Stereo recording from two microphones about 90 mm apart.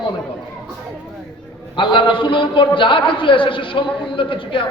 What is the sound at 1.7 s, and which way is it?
A man's voice, 65° left (ahead or behind).